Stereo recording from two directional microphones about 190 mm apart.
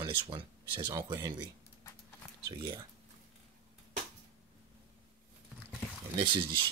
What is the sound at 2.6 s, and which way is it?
Speech, 25° right (ahead or behind).